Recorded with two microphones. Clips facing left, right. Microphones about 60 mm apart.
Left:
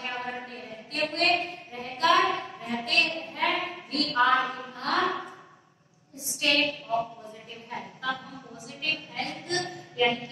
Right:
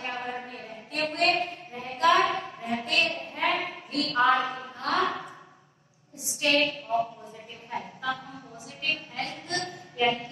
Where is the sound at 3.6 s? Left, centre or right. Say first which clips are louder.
Even; left.